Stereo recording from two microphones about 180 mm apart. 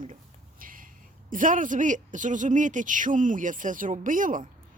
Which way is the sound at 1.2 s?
50° right (ahead or behind).